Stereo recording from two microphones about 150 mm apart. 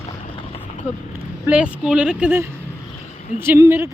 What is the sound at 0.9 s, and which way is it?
Speech, 10° right (ahead or behind).